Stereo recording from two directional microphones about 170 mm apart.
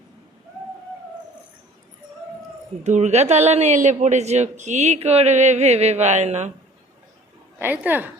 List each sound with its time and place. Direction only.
2.8 s a man's voice: 45° right (ahead or behind)
7.6 s a woman's voice: 10° right (ahead or behind)